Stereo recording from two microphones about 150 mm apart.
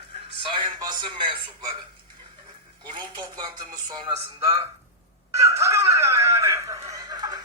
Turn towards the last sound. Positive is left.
turn(degrees=-25)  # may be behind; listen again after turning